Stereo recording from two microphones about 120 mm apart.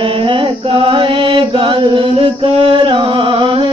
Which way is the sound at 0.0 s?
45° right (ahead or behind).